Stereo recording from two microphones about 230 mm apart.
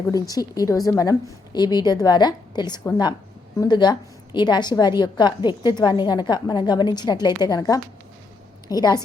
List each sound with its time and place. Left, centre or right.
0.1 s a woman's voice: centre